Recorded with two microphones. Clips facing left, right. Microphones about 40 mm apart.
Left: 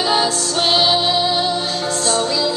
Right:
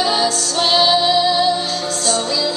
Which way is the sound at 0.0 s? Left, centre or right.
Centre.